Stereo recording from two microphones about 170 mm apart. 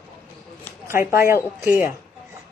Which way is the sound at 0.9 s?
15° right (ahead or behind).